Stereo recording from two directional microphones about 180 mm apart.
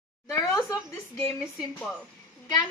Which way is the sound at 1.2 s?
10° left (ahead or behind).